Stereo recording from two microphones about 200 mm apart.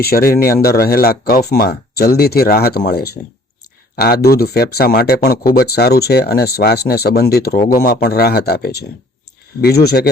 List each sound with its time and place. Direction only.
0.0 s speech: 50° left (ahead or behind)
0.3 s speech: 15° left (ahead or behind)
0.8 s speech: 50° left (ahead or behind)